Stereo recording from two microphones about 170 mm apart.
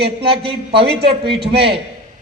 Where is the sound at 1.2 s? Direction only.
30° right (ahead or behind).